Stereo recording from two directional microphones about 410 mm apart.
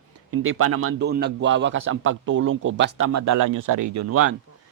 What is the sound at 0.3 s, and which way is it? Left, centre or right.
A man's voice, right.